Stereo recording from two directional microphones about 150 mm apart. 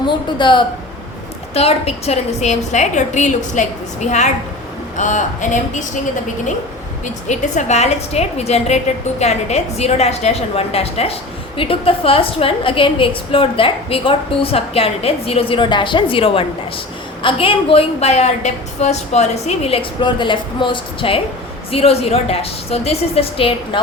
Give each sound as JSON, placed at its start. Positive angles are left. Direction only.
{"t": 0.0, "sound": "a woman's voice", "side_deg": 30}
{"t": 1.5, "sound": "a woman's voice", "side_deg": 40}
{"t": 7.0, "sound": "a woman's voice", "side_deg": 50}